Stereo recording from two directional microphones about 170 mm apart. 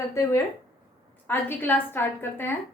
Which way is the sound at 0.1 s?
15° left (ahead or behind).